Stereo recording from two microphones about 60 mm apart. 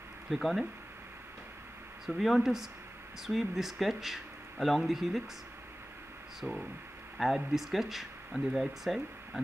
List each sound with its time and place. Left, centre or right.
0.3 s speech: centre
2.0 s speech: centre
6.4 s speech: right
7.2 s speech: centre